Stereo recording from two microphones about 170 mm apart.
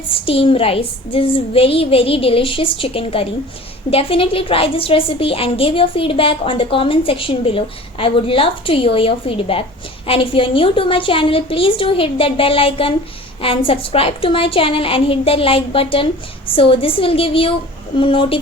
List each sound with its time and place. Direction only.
0.1 s a woman's voice: 30° left (ahead or behind)